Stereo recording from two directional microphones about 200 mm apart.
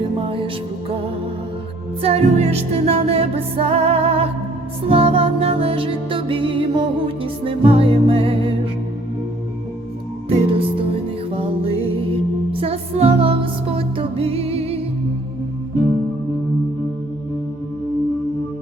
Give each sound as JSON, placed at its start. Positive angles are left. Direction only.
{"t": 0.3, "sound": "music", "side_deg": -25}
{"t": 2.0, "sound": "music", "side_deg": -30}
{"t": 10.2, "sound": "music", "side_deg": -30}